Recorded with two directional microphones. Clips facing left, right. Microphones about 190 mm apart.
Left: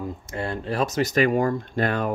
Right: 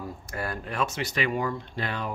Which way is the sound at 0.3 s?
25° left (ahead or behind).